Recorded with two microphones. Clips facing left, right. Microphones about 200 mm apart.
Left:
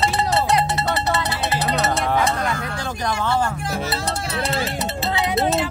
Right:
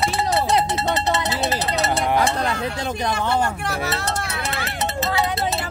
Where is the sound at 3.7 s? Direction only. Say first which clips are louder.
Even; 65° right (ahead or behind).